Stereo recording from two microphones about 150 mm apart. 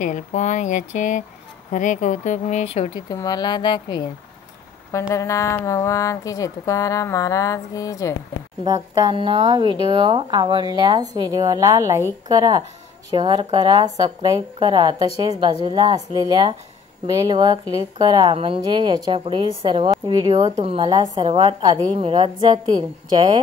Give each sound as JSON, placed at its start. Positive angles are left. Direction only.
{"t": 0.0, "sound": "speech", "side_deg": 55}
{"t": 3.1, "sound": "a woman's voice", "side_deg": 25}
{"t": 5.1, "sound": "a woman's voice", "side_deg": 20}
{"t": 8.6, "sound": "a woman's voice", "side_deg": -25}